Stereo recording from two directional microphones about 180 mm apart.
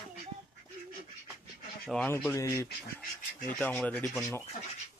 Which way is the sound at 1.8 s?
5° left (ahead or behind).